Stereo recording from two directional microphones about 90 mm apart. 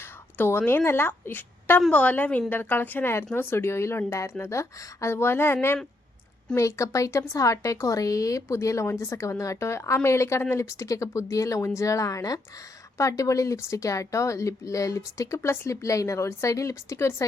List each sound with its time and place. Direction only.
0.3 s a woman's voice: 25° left (ahead or behind)
6.6 s speech: 35° left (ahead or behind)